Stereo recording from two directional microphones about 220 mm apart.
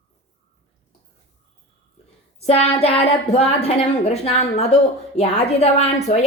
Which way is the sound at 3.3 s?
30° left (ahead or behind).